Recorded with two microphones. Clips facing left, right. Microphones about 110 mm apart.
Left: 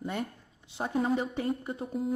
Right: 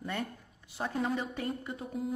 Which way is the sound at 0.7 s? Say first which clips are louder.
Left 4 dB; 25° left (ahead or behind).